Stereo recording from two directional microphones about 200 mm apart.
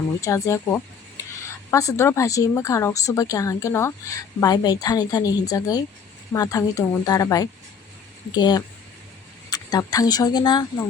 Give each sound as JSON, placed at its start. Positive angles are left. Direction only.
{"t": 0.2, "sound": "a woman's voice", "side_deg": 15}